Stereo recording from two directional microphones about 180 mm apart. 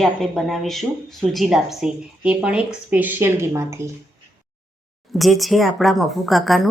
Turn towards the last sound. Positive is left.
turn(degrees=0)  # may be behind; listen again after turning